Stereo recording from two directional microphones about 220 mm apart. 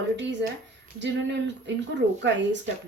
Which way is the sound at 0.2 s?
55° right (ahead or behind).